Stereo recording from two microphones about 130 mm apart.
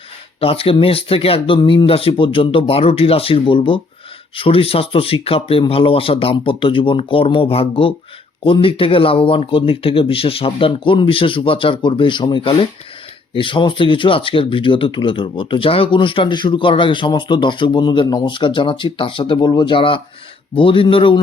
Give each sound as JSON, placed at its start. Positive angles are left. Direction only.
{"t": 0.3, "sound": "speech", "side_deg": 45}